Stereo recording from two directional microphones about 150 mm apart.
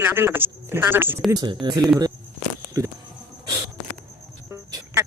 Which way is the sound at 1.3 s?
25° right (ahead or behind).